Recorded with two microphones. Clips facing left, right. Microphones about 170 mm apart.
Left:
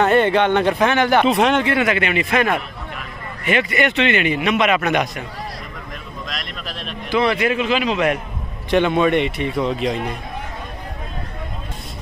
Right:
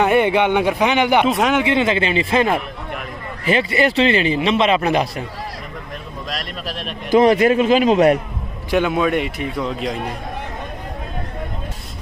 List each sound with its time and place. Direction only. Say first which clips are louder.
0.0 s a man's voice: even; 10° right (ahead or behind)
1.2 s a man's voice: left 1 dB; centre (ahead or behind)
1.6 s a man's voice: right 1 dB; 20° right (ahead or behind)
6.2 s a man's voice: right 4 dB; 40° right (ahead or behind)
8.6 s a man's voice: left 1 dB; 5° right (ahead or behind)